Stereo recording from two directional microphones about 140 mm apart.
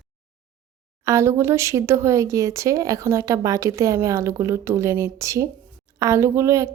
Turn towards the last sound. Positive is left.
turn(degrees=-20)  # may be behind; listen again after turning